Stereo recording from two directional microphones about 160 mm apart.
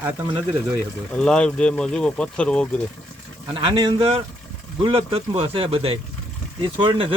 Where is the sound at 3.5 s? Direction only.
35° right (ahead or behind).